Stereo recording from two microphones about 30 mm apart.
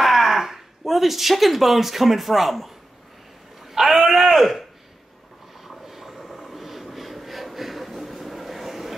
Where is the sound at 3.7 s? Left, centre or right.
Centre.